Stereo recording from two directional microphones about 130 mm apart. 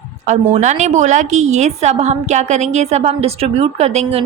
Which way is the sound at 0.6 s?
65° right (ahead or behind).